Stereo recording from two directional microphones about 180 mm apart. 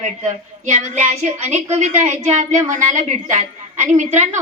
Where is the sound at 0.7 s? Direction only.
40° right (ahead or behind).